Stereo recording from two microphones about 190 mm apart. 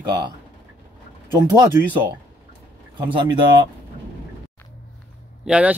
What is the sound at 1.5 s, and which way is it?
Speech, 20° right (ahead or behind).